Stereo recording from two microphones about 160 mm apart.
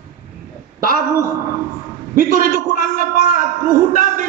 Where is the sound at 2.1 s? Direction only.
55° right (ahead or behind).